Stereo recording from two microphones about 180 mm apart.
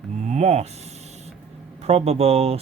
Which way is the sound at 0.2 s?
40° right (ahead or behind).